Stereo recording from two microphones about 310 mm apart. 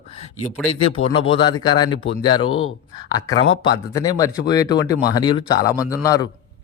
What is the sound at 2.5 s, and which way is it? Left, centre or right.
Speech, left.